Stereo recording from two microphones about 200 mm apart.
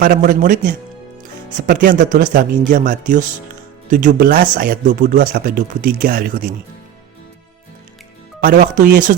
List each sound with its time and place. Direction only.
0.0 s speech: 45° right (ahead or behind)
8.4 s speech: 45° right (ahead or behind)